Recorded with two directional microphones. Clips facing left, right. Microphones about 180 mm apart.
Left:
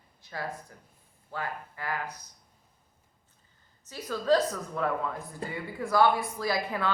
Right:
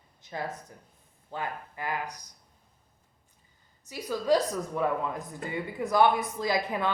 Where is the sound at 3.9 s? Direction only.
15° right (ahead or behind).